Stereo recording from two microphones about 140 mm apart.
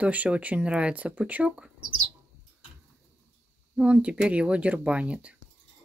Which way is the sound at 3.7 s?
10° right (ahead or behind).